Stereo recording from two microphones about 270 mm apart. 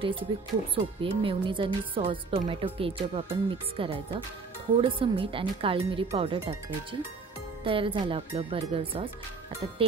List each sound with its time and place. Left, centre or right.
0.0 s a woman's voice: centre